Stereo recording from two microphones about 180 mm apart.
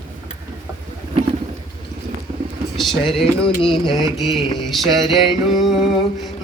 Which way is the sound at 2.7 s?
Centre (ahead or behind).